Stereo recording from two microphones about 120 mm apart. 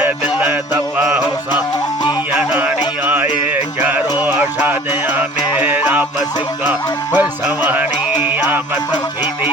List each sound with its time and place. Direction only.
0.0 s music: 15° right (ahead or behind)